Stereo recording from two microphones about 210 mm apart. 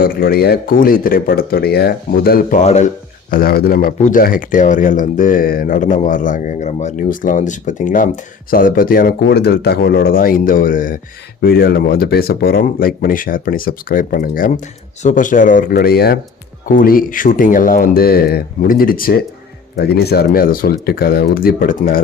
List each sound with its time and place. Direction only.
0.0 s speech: 45° left (ahead or behind)